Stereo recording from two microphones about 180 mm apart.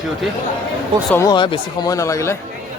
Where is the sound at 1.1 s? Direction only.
20° left (ahead or behind).